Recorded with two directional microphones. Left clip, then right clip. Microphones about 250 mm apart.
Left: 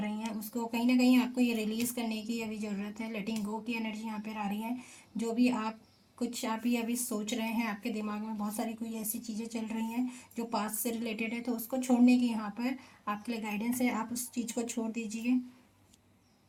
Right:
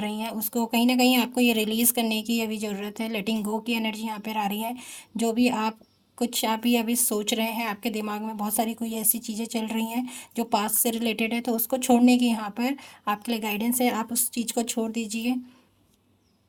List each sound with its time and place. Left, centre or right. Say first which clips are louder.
0.0 s speech: right 8 dB; right